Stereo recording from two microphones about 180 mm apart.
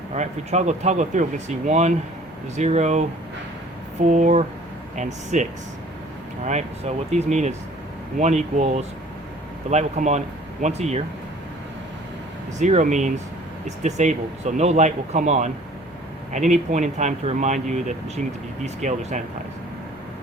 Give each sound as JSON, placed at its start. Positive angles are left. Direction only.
{"t": 0.1, "sound": "speech", "side_deg": -40}
{"t": 12.5, "sound": "speech", "side_deg": -40}